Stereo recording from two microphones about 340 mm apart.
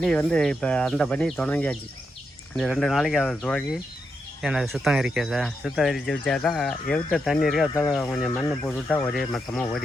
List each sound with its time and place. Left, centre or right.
0.0 s speech: centre